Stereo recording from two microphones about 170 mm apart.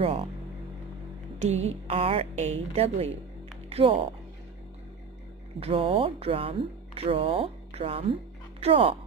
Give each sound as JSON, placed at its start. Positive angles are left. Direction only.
{"t": 1.4, "sound": "a woman's voice", "side_deg": -40}
{"t": 5.6, "sound": "a woman's voice", "side_deg": -35}